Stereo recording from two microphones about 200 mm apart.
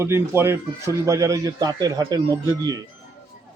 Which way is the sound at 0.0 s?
15° right (ahead or behind).